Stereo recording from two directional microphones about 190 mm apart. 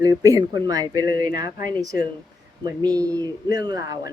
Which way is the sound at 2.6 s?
20° right (ahead or behind).